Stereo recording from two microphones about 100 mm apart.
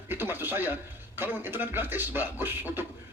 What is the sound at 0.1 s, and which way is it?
A man's voice, 20° right (ahead or behind).